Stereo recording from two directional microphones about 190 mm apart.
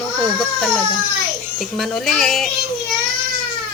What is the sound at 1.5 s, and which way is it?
Speech, centre (ahead or behind).